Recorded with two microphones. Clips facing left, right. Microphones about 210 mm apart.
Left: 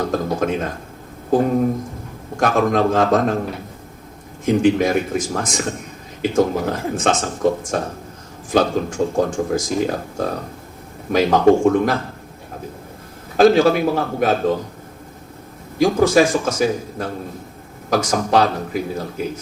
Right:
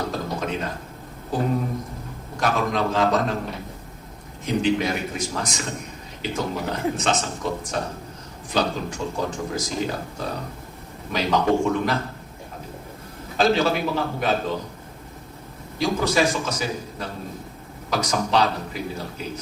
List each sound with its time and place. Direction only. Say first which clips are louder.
0.1 s speech: left 7 dB; 50° left (ahead or behind)
4.4 s speech: left 7 dB; 50° left (ahead or behind)
13.3 s speech: left 8 dB; 50° left (ahead or behind)
15.8 s speech: left 7 dB; 50° left (ahead or behind)